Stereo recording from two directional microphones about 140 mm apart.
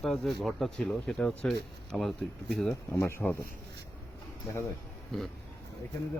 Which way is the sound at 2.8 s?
15° left (ahead or behind).